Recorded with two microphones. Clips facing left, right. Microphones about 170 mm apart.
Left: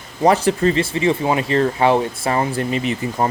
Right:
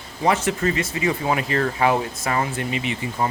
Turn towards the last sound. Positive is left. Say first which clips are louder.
# left 4 dB
turn(degrees=40)  # may be behind; listen again after turning